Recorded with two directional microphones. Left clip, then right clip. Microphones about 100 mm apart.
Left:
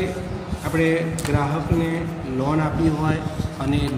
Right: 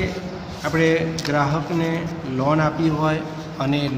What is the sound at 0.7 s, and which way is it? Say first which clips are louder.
Speech: right 2 dB; 35° right (ahead or behind).